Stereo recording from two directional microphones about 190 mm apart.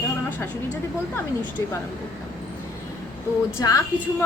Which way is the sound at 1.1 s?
10° left (ahead or behind).